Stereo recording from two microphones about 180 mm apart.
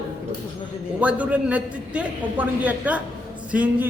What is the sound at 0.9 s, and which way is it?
A man's voice, 10° right (ahead or behind).